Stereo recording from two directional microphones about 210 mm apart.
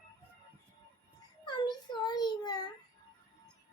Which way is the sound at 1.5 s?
20° left (ahead or behind).